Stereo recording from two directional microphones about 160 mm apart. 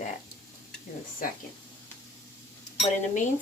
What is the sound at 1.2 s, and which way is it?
Speech, 60° left (ahead or behind).